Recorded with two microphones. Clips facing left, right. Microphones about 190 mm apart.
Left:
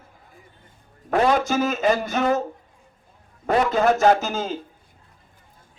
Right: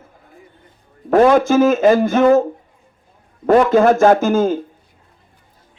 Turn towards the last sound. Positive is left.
turn(degrees=-50)  # may be behind; listen again after turning